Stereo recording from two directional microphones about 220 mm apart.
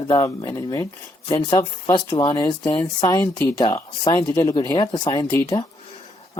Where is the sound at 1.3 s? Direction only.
15° left (ahead or behind).